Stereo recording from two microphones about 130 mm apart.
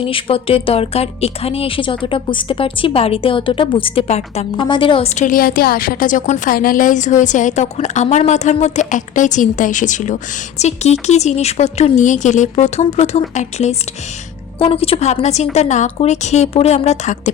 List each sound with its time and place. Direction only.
0.0 s speech: 45° left (ahead or behind)
4.5 s a woman's voice: 35° left (ahead or behind)
5.0 s a woman's voice: 70° left (ahead or behind)
10.6 s speech: 60° left (ahead or behind)
14.6 s speech: 45° left (ahead or behind)